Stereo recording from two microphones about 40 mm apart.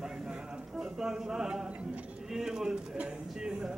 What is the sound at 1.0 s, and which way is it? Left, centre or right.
Speech, centre.